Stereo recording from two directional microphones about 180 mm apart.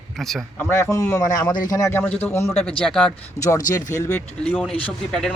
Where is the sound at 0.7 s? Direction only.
15° left (ahead or behind).